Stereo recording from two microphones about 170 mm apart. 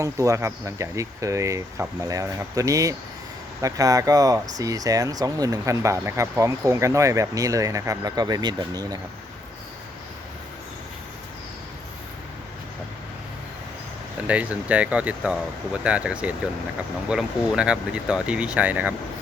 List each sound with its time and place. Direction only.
0.0 s speech: 20° right (ahead or behind)
14.3 s speech: 10° right (ahead or behind)